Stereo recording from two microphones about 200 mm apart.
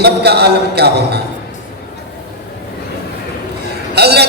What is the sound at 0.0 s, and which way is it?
Music, 55° right (ahead or behind).